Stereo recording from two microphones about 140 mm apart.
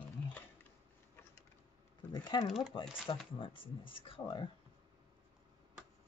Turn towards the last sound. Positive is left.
turn(degrees=35)  # may be behind; listen again after turning